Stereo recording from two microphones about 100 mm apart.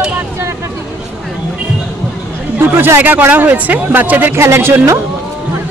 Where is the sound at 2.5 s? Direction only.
25° right (ahead or behind).